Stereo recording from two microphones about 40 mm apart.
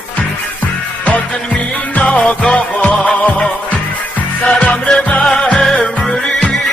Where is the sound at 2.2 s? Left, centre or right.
Left.